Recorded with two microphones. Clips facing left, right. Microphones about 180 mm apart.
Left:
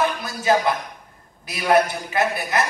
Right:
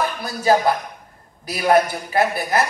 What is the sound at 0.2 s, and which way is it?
Speech, 35° right (ahead or behind).